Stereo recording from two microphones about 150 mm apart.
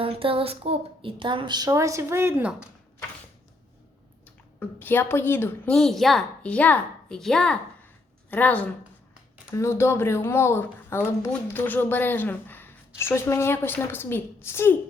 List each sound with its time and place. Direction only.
0.0 s a woman's voice: 40° right (ahead or behind); by 2.6 s 10° right (ahead or behind)
4.8 s speech: 15° left (ahead or behind)